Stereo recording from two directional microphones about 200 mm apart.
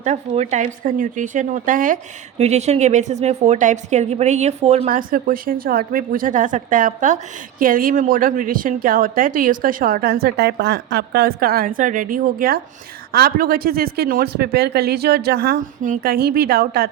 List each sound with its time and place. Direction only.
0.0 s a woman's voice: 35° right (ahead or behind)